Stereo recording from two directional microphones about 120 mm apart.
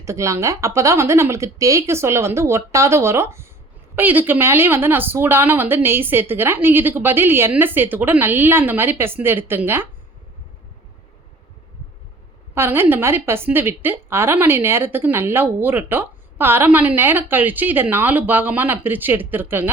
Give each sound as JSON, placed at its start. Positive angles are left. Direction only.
{"t": 0.0, "sound": "a woman's voice", "side_deg": -25}
{"t": 12.5, "sound": "a woman's voice", "side_deg": -20}